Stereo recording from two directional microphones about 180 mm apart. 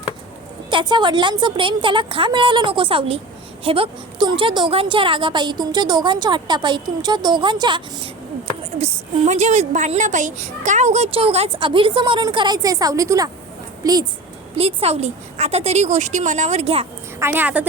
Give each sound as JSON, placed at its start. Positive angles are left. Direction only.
{"t": 0.7, "sound": "a woman's voice", "side_deg": -25}
{"t": 8.8, "sound": "a child's voice", "side_deg": -40}
{"t": 14.5, "sound": "a child's voice", "side_deg": -35}
{"t": 17.2, "sound": "a woman's voice", "side_deg": -10}